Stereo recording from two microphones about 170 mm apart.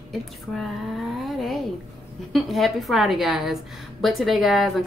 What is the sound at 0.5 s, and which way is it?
A woman's voice, centre (ahead or behind).